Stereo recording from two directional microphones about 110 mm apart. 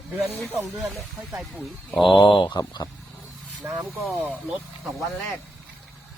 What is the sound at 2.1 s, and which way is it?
Speech, 50° left (ahead or behind).